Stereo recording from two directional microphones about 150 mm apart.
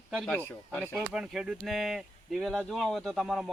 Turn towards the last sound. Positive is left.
turn(degrees=0)  # may be behind; listen again after turning